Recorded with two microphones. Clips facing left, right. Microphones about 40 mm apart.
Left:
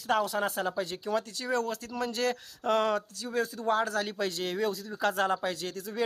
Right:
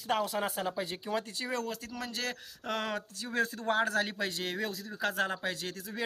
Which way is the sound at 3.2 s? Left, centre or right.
Right.